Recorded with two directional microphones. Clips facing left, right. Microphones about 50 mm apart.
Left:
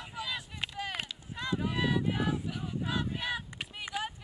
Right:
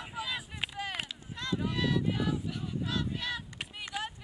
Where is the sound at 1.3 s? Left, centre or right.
Centre.